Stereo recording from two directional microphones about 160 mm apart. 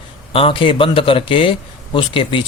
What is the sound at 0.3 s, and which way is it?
A man's voice, 35° left (ahead or behind).